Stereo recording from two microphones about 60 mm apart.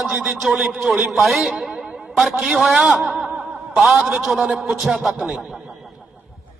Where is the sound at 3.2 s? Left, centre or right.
Centre.